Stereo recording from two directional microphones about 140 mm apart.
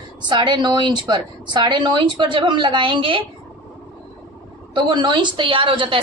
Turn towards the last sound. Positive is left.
turn(degrees=-35)  # may be behind; listen again after turning